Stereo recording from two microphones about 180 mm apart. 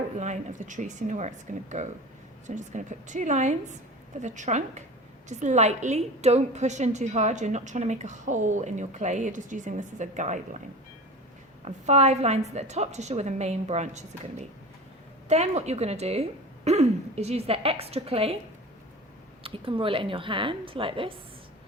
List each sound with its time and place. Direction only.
0.2 s a woman's voice: 40° right (ahead or behind)
11.6 s a woman's voice: 35° right (ahead or behind)
19.4 s a woman's voice: 30° right (ahead or behind)